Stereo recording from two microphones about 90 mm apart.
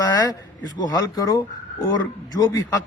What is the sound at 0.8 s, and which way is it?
Speech, 45° left (ahead or behind).